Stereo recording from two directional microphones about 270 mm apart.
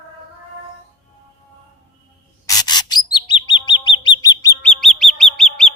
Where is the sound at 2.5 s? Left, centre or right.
Centre.